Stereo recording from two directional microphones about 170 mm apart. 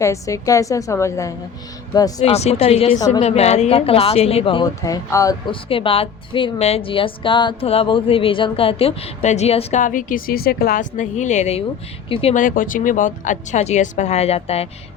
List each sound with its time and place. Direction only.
0.0 s a woman's voice: 20° left (ahead or behind)
2.3 s a woman's voice: 40° left (ahead or behind); by 5.4 s 20° left (ahead or behind)
5.5 s a woman's voice: 30° left (ahead or behind)
9.8 s speech: 50° left (ahead or behind); by 12.3 s 30° left (ahead or behind)
12.3 s speech: 50° left (ahead or behind); by 14.7 s 35° left (ahead or behind)